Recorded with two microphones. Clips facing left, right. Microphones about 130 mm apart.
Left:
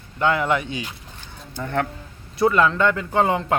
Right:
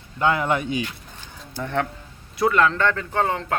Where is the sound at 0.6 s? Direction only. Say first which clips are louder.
Right 4 dB; 25° left (ahead or behind).